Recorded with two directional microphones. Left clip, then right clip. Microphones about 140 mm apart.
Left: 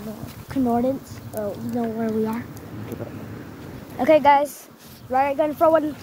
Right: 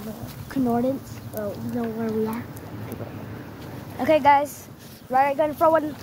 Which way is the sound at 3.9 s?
40° left (ahead or behind).